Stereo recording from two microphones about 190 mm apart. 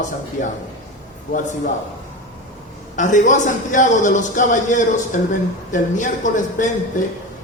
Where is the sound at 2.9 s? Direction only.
40° left (ahead or behind).